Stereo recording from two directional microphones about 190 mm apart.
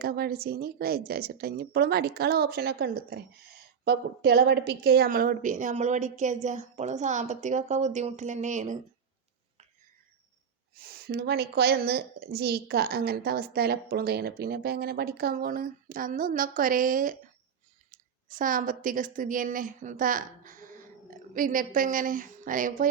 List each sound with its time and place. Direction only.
0.0 s a woman's voice: 55° right (ahead or behind)
10.8 s a woman's voice: 55° right (ahead or behind)